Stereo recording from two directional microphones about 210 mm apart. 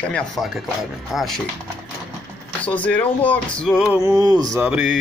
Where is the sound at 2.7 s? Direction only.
5° left (ahead or behind).